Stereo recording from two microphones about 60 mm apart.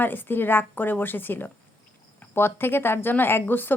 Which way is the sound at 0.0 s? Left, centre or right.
Left.